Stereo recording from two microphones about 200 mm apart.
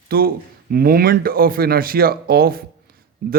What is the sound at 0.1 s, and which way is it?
A man's voice, 50° right (ahead or behind).